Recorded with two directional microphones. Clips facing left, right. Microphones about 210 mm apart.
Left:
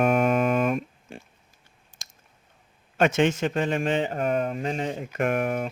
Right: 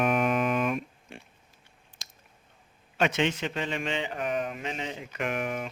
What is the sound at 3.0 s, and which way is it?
A man's voice, 50° left (ahead or behind).